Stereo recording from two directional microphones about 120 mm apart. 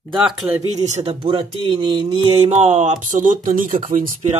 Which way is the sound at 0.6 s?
70° right (ahead or behind).